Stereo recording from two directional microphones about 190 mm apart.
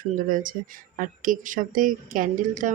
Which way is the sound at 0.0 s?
45° right (ahead or behind).